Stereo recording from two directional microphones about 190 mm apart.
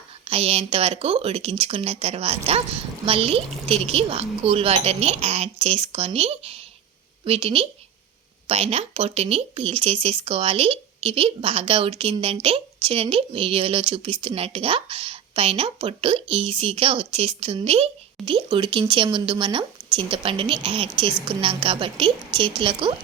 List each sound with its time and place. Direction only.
0.3 s speech: 30° right (ahead or behind)